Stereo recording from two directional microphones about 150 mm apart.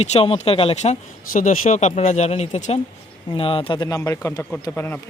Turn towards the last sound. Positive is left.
turn(degrees=15)  # may be behind; listen again after turning